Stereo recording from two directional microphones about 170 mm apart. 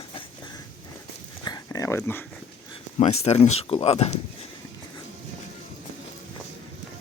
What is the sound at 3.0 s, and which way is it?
Speech, 40° left (ahead or behind).